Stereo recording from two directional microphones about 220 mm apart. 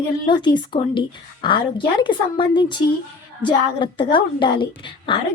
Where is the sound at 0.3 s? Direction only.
20° left (ahead or behind).